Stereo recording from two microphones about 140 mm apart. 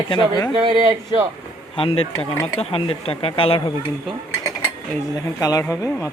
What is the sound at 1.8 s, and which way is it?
Speech, 40° left (ahead or behind).